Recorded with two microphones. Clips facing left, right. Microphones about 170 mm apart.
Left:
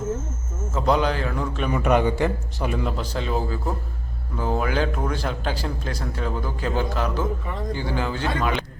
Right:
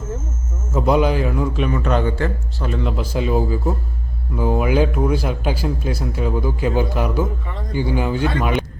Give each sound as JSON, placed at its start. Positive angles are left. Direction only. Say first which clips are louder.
{"t": 0.7, "sound": "speech", "louder": "right 5 dB", "side_deg": -10}
{"t": 1.7, "sound": "a man's voice", "louder": "even", "side_deg": 10}
{"t": 2.9, "sound": "speech", "louder": "right 6 dB", "side_deg": -10}